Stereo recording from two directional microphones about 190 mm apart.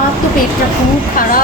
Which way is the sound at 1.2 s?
45° left (ahead or behind).